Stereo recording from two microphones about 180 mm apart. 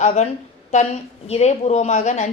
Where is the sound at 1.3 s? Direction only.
35° left (ahead or behind).